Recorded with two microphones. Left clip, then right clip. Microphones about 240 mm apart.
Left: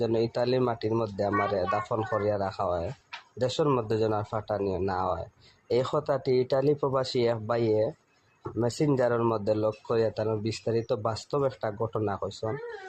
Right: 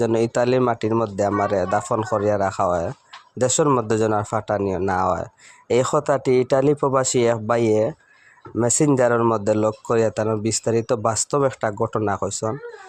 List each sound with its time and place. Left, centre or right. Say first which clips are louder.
0.0 s speech: right 7 dB; right